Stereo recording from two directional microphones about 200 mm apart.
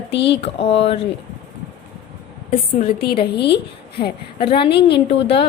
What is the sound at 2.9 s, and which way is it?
Speech, 50° left (ahead or behind).